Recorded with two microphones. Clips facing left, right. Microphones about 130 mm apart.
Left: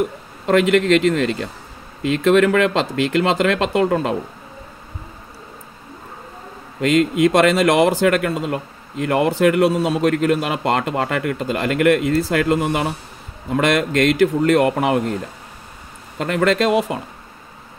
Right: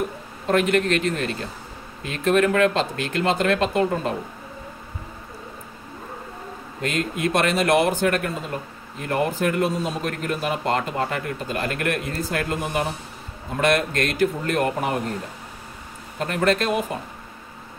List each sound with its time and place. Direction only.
0.5 s speech: 90° left
6.8 s speech: 90° left
16.2 s speech: 90° left